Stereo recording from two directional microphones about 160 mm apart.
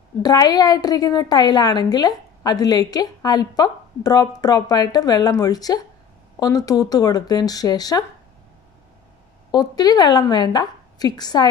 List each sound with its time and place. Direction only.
0.2 s a woman's voice: 25° left (ahead or behind)
9.5 s a woman's voice: 25° left (ahead or behind)